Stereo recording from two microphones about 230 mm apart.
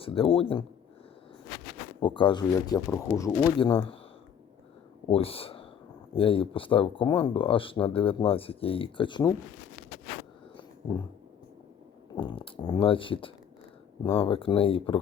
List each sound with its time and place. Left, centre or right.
0.0 s speech: left
2.0 s speech: left
5.0 s speech: left
10.6 s dog: centre
12.1 s speech: centre